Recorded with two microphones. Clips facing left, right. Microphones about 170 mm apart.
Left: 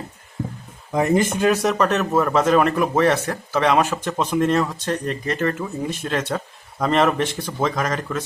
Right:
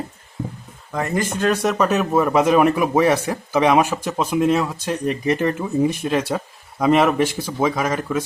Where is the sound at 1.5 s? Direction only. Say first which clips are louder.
Right 3 dB; centre (ahead or behind).